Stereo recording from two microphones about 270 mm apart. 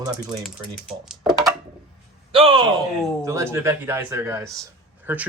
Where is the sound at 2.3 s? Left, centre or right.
Centre.